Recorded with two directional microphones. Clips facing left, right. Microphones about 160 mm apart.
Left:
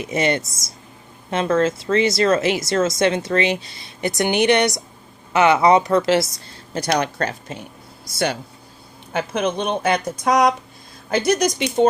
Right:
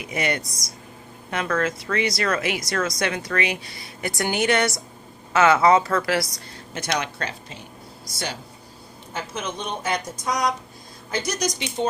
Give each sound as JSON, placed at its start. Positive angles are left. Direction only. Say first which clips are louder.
{"t": 0.0, "sound": "speech", "louder": "left 6 dB", "side_deg": 25}
{"t": 6.9, "sound": "speech", "louder": "left 6 dB", "side_deg": 45}
{"t": 9.1, "sound": "a woman's voice", "louder": "left 9 dB", "side_deg": 60}